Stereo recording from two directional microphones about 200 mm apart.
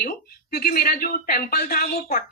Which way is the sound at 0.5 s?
45° left (ahead or behind).